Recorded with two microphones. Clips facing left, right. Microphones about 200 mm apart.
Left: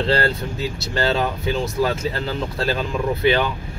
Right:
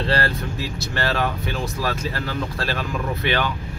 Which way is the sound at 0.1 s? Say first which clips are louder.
Left 3 dB; 25° left (ahead or behind).